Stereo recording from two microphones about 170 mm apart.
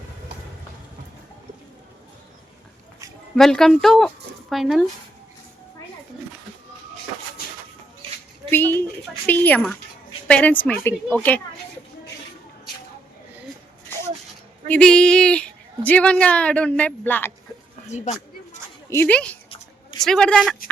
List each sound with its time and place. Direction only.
3.3 s a woman's voice: 5° left (ahead or behind)
8.4 s a woman's voice: 10° left (ahead or behind)
14.7 s a woman's voice: 5° left (ahead or behind)
17.8 s speech: 40° left (ahead or behind)
18.9 s a woman's voice: 10° left (ahead or behind)